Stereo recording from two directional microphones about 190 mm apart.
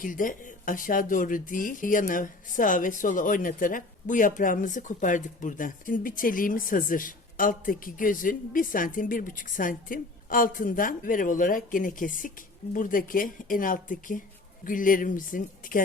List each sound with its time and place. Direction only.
0.0 s speech: 45° left (ahead or behind)